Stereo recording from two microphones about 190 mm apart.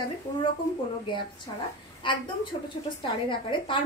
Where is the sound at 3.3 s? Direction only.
25° left (ahead or behind).